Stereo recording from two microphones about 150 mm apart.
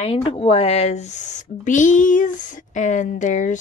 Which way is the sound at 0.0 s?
40° left (ahead or behind).